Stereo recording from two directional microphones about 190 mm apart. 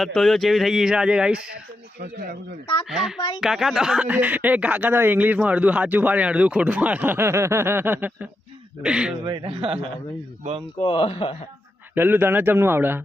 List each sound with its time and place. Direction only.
0.0 s speech: centre (ahead or behind)
2.9 s speech: 5° right (ahead or behind)
3.2 s speech: 20° left (ahead or behind)
3.4 s speech: centre (ahead or behind)
9.2 s a man's voice: 25° right (ahead or behind)
10.8 s speech: 25° left (ahead or behind)
11.9 s speech: 10° right (ahead or behind)